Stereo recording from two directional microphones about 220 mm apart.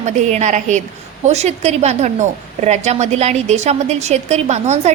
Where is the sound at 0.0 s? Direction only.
30° right (ahead or behind).